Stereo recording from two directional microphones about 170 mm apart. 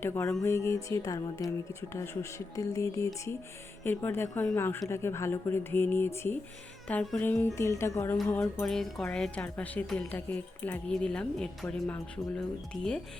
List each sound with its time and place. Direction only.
0.0 s speech: 15° left (ahead or behind)
12.7 s speech: 25° left (ahead or behind)